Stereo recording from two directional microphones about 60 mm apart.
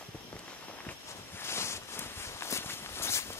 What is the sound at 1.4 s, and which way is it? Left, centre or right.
Walk, left.